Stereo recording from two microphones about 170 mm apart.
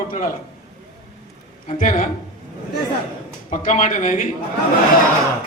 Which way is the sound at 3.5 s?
45° left (ahead or behind).